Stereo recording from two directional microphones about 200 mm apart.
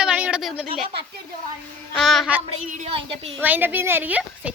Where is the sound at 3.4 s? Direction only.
10° right (ahead or behind).